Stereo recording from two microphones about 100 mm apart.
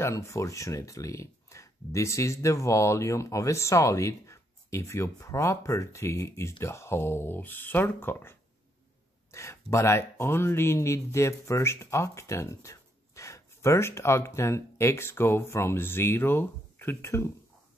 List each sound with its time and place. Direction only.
0.0 s speech: 30° left (ahead or behind)